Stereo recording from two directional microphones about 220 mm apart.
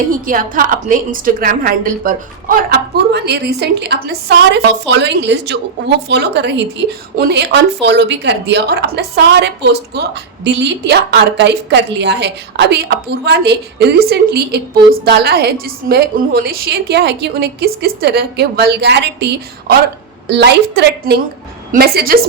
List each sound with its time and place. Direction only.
0.1 s a woman's voice: 40° right (ahead or behind)